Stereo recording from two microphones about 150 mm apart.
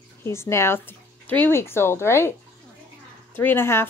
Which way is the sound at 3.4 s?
15° left (ahead or behind).